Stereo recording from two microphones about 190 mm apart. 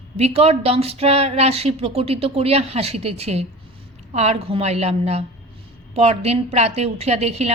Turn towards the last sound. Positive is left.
turn(degrees=-35)  # may be behind; listen again after turning